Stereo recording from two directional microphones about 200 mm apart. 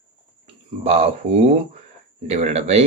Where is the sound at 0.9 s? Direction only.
30° right (ahead or behind).